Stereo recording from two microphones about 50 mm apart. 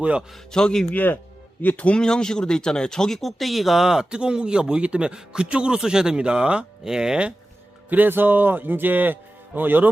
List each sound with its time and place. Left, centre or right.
0.5 s speech: centre
0.9 s speech: left
1.6 s speech: left
2.0 s speech: centre
7.9 s speech: right